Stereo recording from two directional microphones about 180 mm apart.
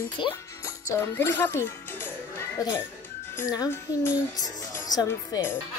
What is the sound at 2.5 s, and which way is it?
A child's voice, 20° left (ahead or behind).